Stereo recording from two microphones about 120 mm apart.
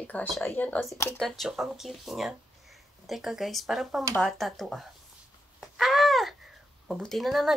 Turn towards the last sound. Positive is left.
turn(degrees=0)  # may be behind; listen again after turning